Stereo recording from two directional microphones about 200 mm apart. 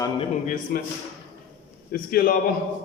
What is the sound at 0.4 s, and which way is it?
Speech, 40° left (ahead or behind).